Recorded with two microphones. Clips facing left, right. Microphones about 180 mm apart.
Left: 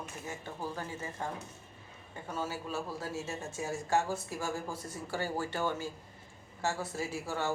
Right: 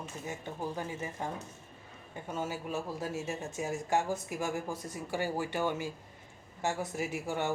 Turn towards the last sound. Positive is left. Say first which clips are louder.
# right 1 dB
turn(degrees=-20)  # may be behind; listen again after turning